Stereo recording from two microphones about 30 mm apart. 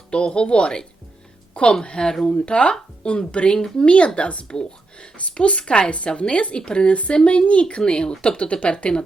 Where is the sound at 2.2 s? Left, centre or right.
Left.